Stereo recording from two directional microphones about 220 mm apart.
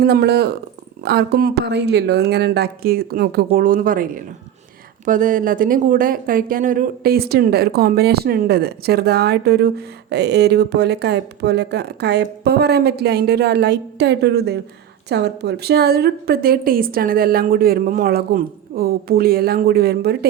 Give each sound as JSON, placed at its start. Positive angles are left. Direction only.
{"t": 0.0, "sound": "speech", "side_deg": -50}